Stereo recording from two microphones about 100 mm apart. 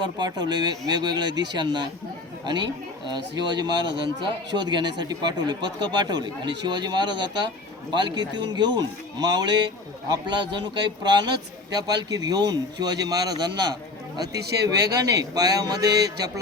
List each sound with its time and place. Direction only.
0.0 s speech: 45° right (ahead or behind)
3.1 s speech: 45° right (ahead or behind)
14.8 s speech: 40° right (ahead or behind)